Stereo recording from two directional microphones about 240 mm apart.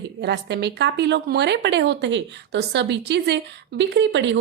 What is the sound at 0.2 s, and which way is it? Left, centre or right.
A woman's voice, right.